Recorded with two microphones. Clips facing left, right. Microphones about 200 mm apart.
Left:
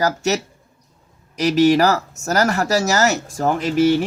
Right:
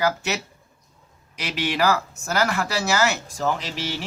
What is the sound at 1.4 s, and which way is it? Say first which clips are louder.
Speech: left 10 dB; 40° left (ahead or behind).